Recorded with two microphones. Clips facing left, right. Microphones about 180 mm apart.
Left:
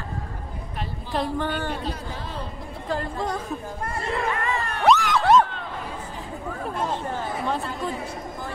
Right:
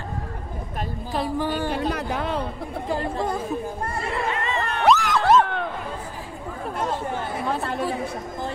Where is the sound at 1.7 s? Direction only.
70° right (ahead or behind).